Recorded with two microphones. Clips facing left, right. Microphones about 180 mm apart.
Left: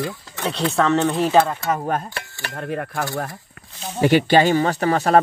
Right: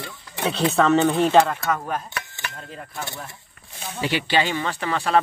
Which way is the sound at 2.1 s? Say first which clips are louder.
Left 1 dB; 35° left (ahead or behind).